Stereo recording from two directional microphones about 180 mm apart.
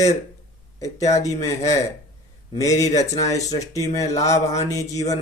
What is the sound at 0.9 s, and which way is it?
Speech, 40° left (ahead or behind).